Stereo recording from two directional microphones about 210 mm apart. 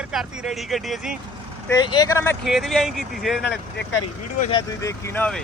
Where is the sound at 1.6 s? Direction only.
20° left (ahead or behind).